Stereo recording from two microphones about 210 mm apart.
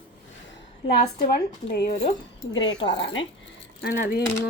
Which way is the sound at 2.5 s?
60° left (ahead or behind).